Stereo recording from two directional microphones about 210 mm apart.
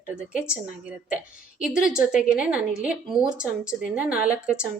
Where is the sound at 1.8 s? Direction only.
5° right (ahead or behind).